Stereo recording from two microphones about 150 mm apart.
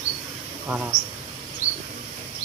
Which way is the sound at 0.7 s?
5° right (ahead or behind).